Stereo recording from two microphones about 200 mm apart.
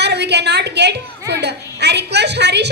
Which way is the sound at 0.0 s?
55° right (ahead or behind).